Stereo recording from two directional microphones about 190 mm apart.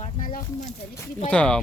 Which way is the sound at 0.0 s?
45° left (ahead or behind).